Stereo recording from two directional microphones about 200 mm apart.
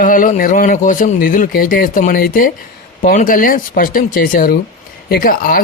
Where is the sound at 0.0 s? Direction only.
45° left (ahead or behind).